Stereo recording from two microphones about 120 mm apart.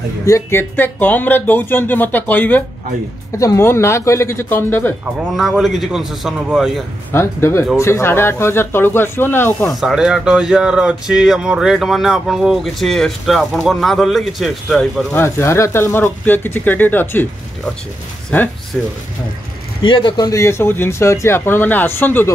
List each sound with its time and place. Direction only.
0.3 s speech: 20° left (ahead or behind)
3.3 s speech: 25° left (ahead or behind)
5.3 s speech: centre (ahead or behind)
7.1 s speech: 20° left (ahead or behind)
9.7 s speech: centre (ahead or behind)
15.1 s speech: 20° left (ahead or behind)
18.3 s speech: 15° left (ahead or behind)
19.8 s a man's voice: 45° left (ahead or behind)
20.2 s speech: 25° left (ahead or behind)